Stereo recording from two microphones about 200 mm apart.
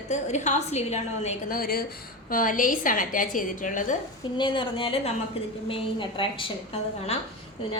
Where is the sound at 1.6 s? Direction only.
50° left (ahead or behind).